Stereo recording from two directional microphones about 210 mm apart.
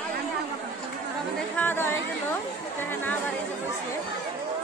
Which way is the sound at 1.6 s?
10° left (ahead or behind).